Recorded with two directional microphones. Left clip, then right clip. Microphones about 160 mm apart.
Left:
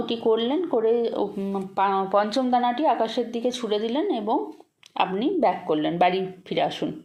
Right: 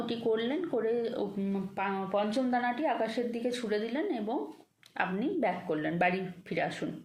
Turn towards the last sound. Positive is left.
turn(degrees=25)  # may be behind; listen again after turning